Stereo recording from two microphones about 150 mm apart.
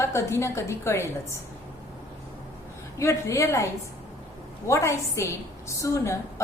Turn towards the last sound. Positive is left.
turn(degrees=20)  # may be behind; listen again after turning